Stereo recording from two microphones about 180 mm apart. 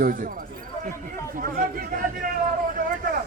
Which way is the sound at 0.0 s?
50° right (ahead or behind).